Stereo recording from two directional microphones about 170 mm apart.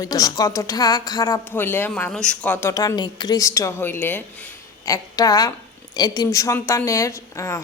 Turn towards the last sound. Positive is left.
turn(degrees=15)  # may be behind; listen again after turning